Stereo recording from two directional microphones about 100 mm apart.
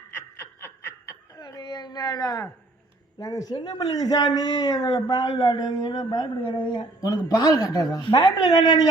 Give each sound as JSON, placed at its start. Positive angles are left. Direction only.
{"t": 0.2, "sound": "snicker", "side_deg": 25}
{"t": 1.4, "sound": "a woman's voice", "side_deg": 45}
{"t": 6.4, "sound": "a woman's voice", "side_deg": 55}